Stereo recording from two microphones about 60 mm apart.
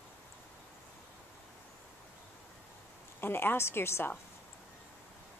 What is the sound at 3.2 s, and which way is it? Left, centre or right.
Speech, left.